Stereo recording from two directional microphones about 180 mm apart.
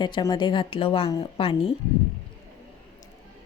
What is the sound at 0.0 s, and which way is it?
A woman's voice, 25° left (ahead or behind).